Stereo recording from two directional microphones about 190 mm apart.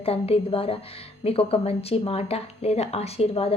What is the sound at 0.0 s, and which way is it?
A woman's voice, 30° left (ahead or behind).